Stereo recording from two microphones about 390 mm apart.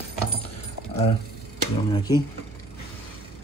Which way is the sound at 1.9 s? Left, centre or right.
Centre.